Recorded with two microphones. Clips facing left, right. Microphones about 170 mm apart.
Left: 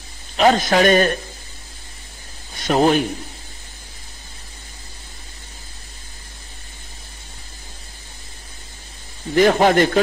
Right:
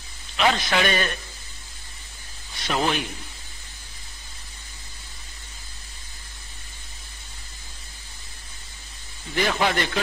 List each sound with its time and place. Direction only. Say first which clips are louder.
0.4 s a man's voice: left 7 dB; 45° left (ahead or behind)
2.5 s speech: left 9 dB; 45° left (ahead or behind)
9.3 s a man's voice: left 10 dB; 45° left (ahead or behind)